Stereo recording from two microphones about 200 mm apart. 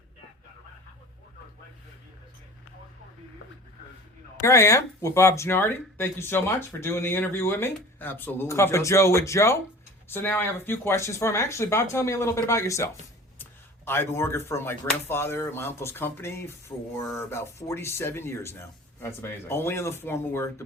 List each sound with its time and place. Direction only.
4.4 s speech: 15° left (ahead or behind)